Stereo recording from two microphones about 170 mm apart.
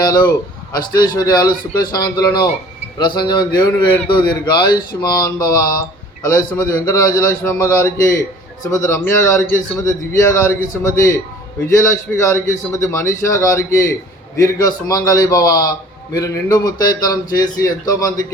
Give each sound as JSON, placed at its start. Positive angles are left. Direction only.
{"t": 0.0, "sound": "a man's voice", "side_deg": 25}